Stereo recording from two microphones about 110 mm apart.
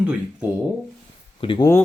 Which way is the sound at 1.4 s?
50° left (ahead or behind).